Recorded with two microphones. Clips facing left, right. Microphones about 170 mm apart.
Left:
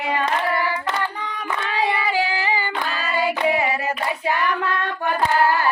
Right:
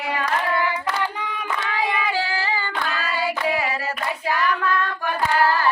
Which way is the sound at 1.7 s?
15° left (ahead or behind).